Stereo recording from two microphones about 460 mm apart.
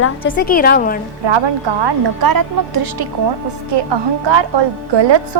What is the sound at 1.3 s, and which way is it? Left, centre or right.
Speech, right.